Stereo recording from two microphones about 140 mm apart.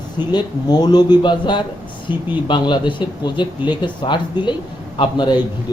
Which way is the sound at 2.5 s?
35° left (ahead or behind).